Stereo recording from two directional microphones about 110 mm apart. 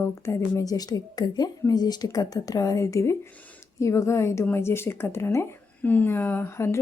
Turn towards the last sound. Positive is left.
turn(degrees=25)  # may be behind; listen again after turning